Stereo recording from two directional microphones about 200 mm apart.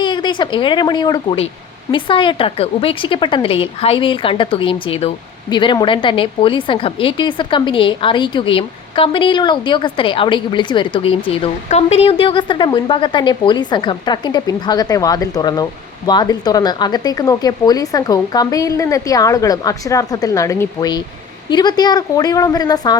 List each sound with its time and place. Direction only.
0.0 s a woman's voice: 20° left (ahead or behind)